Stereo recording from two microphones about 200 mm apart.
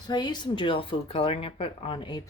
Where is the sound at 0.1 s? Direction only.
20° left (ahead or behind).